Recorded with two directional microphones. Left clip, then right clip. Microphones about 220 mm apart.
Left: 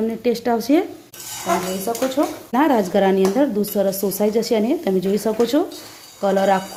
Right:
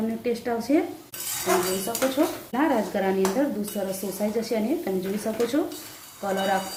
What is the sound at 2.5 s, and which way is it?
Speech, 50° left (ahead or behind).